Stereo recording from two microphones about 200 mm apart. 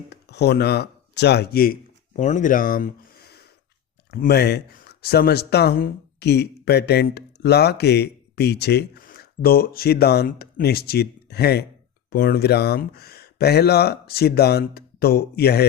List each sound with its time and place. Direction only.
0.1 s speech: 55° left (ahead or behind)